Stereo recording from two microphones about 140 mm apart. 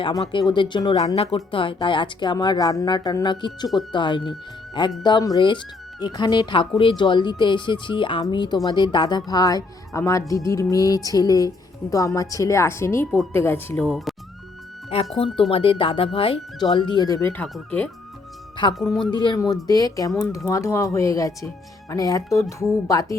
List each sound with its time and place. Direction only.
0.0 s speech: 30° left (ahead or behind)
0.9 s speech: 50° left (ahead or behind); by 13.8 s 15° left (ahead or behind)
13.8 s speech: centre (ahead or behind)
15.2 s speech: 40° left (ahead or behind); by 17.4 s 20° left (ahead or behind)
17.4 s speech: 10° left (ahead or behind)
19.1 s speech: 35° left (ahead or behind)